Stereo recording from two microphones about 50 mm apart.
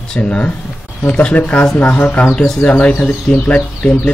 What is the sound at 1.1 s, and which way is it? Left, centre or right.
Speech, left.